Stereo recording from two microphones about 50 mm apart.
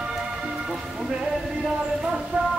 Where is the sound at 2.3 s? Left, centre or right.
Right.